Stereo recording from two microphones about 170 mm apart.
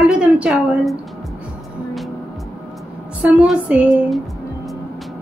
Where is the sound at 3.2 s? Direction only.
5° right (ahead or behind).